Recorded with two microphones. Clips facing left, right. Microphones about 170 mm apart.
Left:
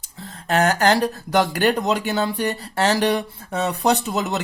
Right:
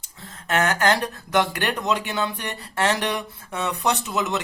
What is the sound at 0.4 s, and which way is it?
Speech, 35° left (ahead or behind).